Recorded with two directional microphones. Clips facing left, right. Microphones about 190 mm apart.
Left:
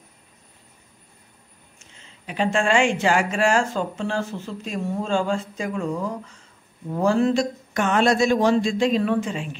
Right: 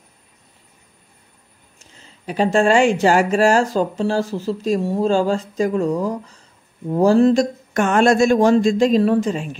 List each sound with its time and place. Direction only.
1.8 s speech: 40° right (ahead or behind)